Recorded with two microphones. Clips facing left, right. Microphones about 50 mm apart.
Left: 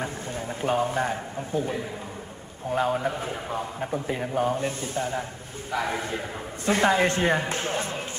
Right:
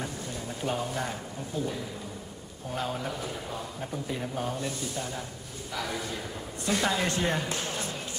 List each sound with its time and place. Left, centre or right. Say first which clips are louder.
0.6 s a man's voice: left 7 dB; left